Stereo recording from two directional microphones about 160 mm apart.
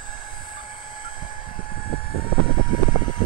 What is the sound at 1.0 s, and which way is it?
Vehicle, 60° left (ahead or behind).